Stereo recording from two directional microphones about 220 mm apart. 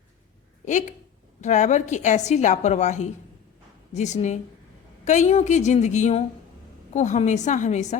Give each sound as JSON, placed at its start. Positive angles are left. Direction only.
{"t": 0.6, "sound": "a woman's voice", "side_deg": 35}